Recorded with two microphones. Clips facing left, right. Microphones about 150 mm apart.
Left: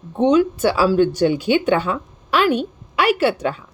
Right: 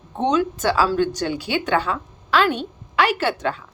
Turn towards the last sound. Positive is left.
turn(degrees=15)  # may be behind; listen again after turning